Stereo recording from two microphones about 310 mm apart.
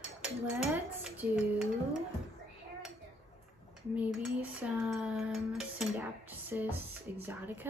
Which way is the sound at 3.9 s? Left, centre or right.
Centre.